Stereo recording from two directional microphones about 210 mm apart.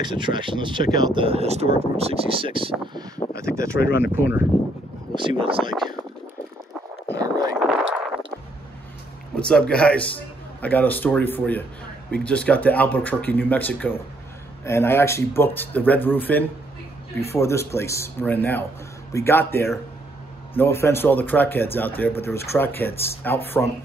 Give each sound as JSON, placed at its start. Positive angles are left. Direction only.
{"t": 0.0, "sound": "speech", "side_deg": -20}
{"t": 4.1, "sound": "speech", "side_deg": -10}
{"t": 5.4, "sound": "speech", "side_deg": -25}
{"t": 7.2, "sound": "a sound", "side_deg": -15}
{"t": 9.3, "sound": "a man's voice", "side_deg": 5}